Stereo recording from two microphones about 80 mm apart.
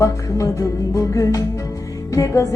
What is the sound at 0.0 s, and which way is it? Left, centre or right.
Music, left.